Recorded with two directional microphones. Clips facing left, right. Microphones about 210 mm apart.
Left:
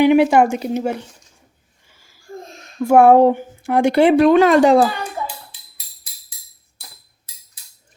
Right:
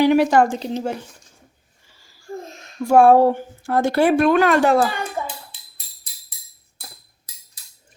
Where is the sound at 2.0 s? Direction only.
15° left (ahead or behind).